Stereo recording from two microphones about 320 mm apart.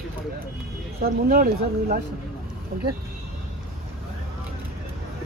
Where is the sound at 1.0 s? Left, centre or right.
Right.